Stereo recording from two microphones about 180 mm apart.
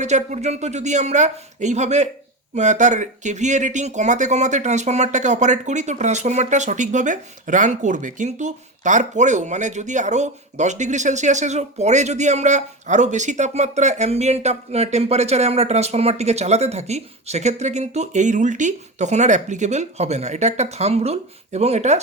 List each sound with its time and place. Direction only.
0.0 s speech: 40° right (ahead or behind)